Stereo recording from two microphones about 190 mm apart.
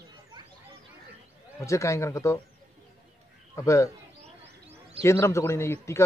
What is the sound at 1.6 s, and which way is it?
Speech, 15° left (ahead or behind).